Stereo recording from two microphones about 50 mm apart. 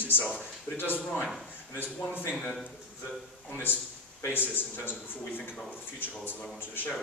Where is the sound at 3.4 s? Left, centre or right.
Left.